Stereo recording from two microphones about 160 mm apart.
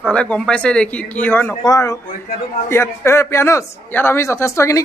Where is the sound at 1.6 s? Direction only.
20° left (ahead or behind).